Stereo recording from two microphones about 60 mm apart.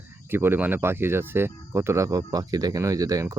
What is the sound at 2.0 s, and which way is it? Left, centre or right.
Speech, right.